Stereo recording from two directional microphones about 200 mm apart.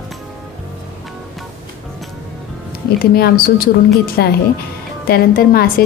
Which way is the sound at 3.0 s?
50° left (ahead or behind).